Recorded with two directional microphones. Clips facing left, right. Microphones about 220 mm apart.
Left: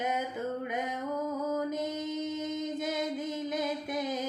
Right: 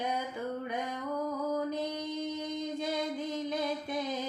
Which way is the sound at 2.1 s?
20° left (ahead or behind).